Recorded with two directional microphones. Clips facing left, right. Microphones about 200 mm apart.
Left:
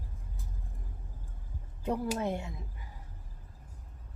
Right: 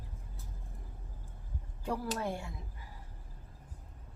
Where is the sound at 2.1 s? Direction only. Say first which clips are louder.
Left 4 dB; 20° left (ahead or behind).